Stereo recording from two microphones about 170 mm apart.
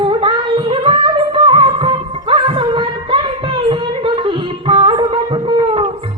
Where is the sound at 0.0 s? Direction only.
30° right (ahead or behind).